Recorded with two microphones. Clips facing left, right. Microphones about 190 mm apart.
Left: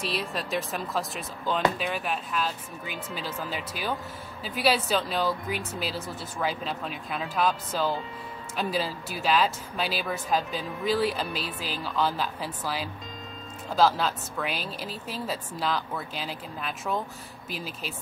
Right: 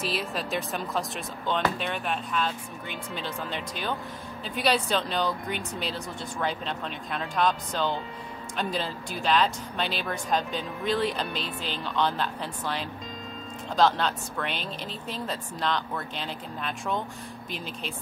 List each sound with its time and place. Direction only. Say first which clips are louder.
0.0 s speech: right 1 dB; centre (ahead or behind)